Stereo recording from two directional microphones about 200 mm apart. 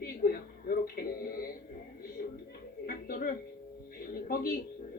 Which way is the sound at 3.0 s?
45° left (ahead or behind).